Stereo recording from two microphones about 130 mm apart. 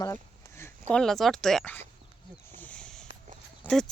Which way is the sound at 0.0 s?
20° left (ahead or behind).